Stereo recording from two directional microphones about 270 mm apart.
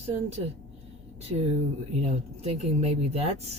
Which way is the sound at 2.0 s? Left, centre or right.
Right.